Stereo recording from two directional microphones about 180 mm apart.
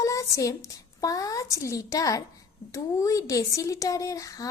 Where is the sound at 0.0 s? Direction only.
15° left (ahead or behind).